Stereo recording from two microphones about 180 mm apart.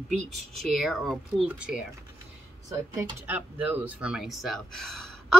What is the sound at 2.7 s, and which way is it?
Speech, 15° right (ahead or behind).